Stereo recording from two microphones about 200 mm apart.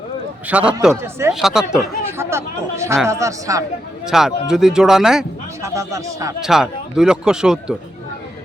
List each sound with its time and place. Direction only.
0.4 s speech: 5° right (ahead or behind)
4.0 s speech: centre (ahead or behind)
5.6 s speech: 15° right (ahead or behind)
6.4 s speech: centre (ahead or behind)